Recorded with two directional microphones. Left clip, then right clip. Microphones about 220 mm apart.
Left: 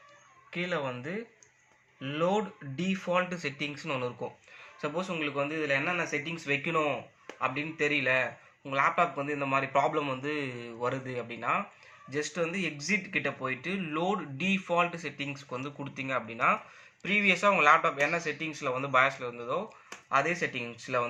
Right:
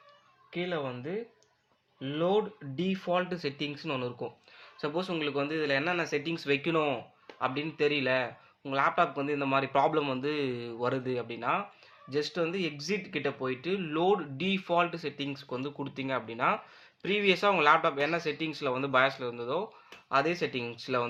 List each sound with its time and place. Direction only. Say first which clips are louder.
0.5 s speech: left 1 dB; 40° right (ahead or behind)
4.8 s speech: even; 50° right (ahead or behind)